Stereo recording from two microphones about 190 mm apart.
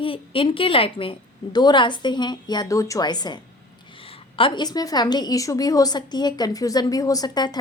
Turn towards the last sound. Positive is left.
turn(degrees=20)  # may be behind; listen again after turning